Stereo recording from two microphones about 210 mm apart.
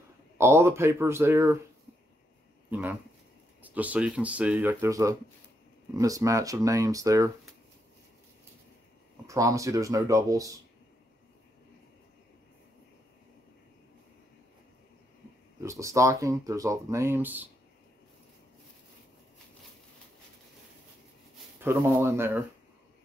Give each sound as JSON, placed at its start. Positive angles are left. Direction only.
{"t": 0.4, "sound": "speech", "side_deg": -10}
{"t": 2.7, "sound": "speech", "side_deg": -10}
{"t": 9.3, "sound": "speech", "side_deg": -15}
{"t": 15.6, "sound": "speech", "side_deg": -15}
{"t": 21.5, "sound": "speech", "side_deg": -10}